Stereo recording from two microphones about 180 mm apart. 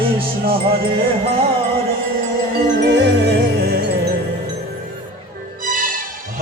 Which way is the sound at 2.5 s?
70° right (ahead or behind).